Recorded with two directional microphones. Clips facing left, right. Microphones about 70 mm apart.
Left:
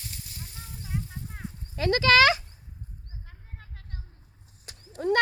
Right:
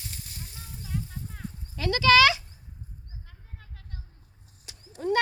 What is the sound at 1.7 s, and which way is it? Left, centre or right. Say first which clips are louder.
Speech: right 1 dB; left.